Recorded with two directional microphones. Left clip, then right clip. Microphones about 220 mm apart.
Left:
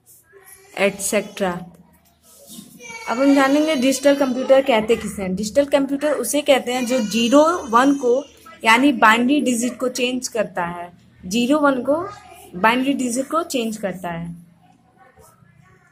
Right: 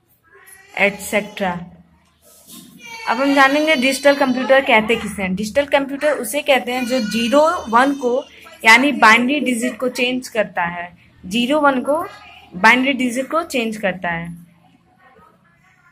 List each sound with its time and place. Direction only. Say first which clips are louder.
0.7 s speech: right 2 dB; 15° left (ahead or behind)
3.1 s speech: right 2 dB; 10° left (ahead or behind)